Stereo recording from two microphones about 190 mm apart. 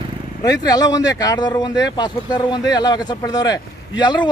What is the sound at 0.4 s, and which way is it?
Speech, 20° left (ahead or behind).